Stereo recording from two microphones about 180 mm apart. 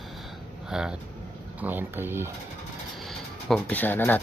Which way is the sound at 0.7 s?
5° right (ahead or behind).